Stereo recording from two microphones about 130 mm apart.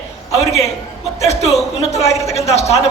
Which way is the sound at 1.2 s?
55° left (ahead or behind).